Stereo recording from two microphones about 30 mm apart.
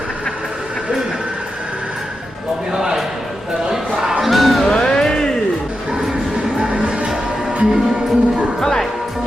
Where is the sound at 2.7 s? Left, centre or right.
Centre.